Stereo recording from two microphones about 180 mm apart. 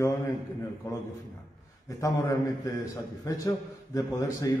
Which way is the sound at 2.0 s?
20° left (ahead or behind).